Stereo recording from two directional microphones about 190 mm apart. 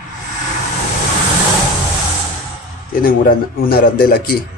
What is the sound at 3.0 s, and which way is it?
Speech, 50° left (ahead or behind).